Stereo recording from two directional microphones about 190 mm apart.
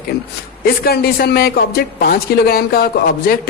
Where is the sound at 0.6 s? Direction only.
55° left (ahead or behind).